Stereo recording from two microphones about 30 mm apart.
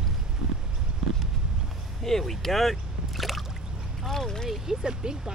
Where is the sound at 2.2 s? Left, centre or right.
Centre.